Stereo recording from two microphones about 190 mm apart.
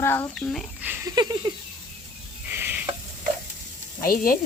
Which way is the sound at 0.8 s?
15° right (ahead or behind).